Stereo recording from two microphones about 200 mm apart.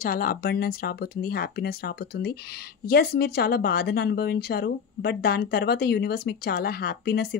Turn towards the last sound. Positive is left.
turn(degrees=50)  # may be behind; listen again after turning